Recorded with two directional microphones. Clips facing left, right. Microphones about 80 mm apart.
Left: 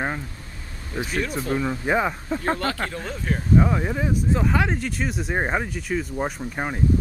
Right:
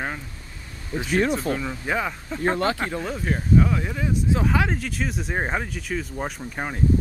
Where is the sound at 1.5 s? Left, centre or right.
Centre.